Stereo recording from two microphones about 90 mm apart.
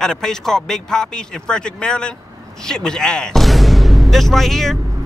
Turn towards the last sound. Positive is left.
turn(degrees=5)  # may be behind; listen again after turning